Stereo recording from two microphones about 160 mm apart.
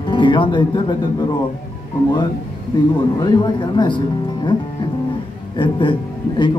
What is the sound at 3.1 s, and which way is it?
Speech, 30° left (ahead or behind).